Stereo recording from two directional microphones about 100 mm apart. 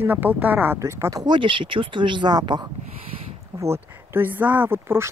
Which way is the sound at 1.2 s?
55° right (ahead or behind).